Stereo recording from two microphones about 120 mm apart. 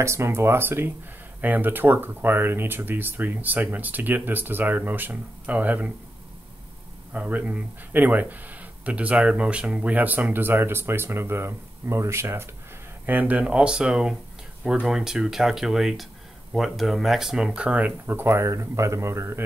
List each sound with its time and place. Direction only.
0.0 s speech: 20° right (ahead or behind)
7.2 s speech: 15° right (ahead or behind)